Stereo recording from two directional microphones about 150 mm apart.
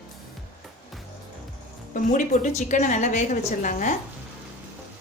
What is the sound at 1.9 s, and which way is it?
A woman's voice, 60° left (ahead or behind).